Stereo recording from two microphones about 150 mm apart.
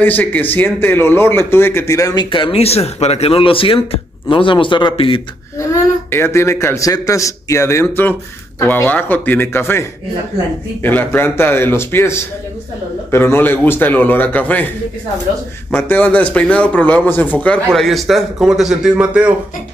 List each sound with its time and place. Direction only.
0.0 s a man's voice: 10° left (ahead or behind)
2.2 s speech: 35° left (ahead or behind)
5.6 s a man's voice: 15° left (ahead or behind)
15.7 s a man's voice: 10° left (ahead or behind); by 19.3 s 5° right (ahead or behind)